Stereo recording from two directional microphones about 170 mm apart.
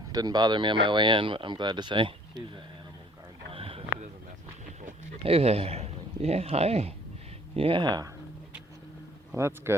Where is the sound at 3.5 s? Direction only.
35° right (ahead or behind).